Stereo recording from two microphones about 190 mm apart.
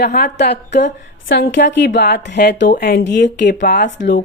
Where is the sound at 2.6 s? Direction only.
50° left (ahead or behind); by 4.1 s 65° left (ahead or behind).